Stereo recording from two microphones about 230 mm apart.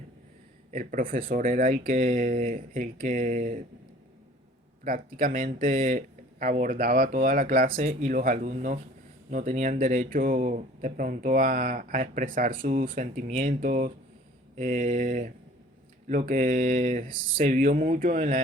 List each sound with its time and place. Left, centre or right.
0.7 s speech: right
4.8 s speech: right